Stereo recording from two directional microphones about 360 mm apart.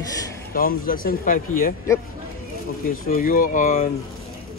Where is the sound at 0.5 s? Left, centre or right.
Left.